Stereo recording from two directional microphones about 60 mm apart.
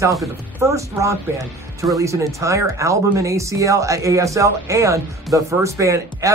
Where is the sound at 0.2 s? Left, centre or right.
Right.